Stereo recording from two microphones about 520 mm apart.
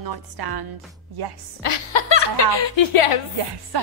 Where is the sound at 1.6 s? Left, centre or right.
Left.